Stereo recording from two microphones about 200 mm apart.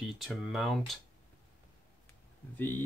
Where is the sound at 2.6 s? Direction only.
10° left (ahead or behind).